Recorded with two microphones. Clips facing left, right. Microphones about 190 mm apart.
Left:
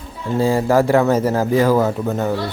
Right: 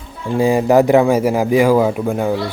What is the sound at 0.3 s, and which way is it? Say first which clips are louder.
Speech: right 3 dB; 15° right (ahead or behind).